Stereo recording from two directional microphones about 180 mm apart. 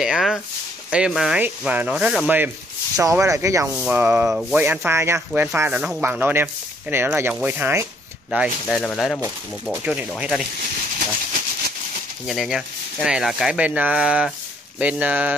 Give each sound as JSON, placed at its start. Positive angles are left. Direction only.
{"t": 0.0, "sound": "speech", "side_deg": -5}
{"t": 8.3, "sound": "speech", "side_deg": -5}
{"t": 12.3, "sound": "speech", "side_deg": 0}